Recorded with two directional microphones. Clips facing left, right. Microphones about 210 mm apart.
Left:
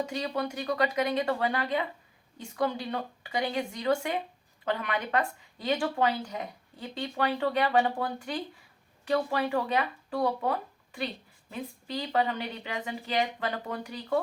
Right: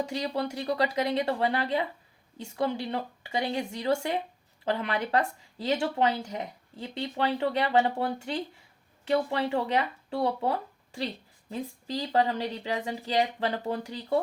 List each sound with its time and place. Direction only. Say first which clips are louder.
0.0 s speech: right 1 dB; 30° right (ahead or behind)